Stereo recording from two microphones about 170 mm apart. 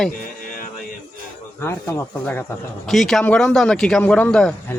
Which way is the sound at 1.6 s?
15° left (ahead or behind).